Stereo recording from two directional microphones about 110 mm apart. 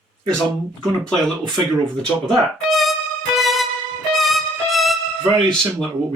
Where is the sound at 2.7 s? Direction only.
Centre (ahead or behind).